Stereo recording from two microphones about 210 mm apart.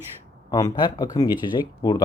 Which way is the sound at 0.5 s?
20° left (ahead or behind).